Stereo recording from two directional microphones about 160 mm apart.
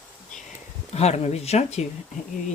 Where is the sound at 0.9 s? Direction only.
40° left (ahead or behind).